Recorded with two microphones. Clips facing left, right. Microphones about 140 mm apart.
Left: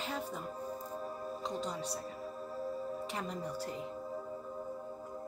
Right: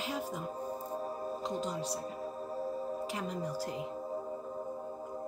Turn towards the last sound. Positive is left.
turn(degrees=0)  # may be behind; listen again after turning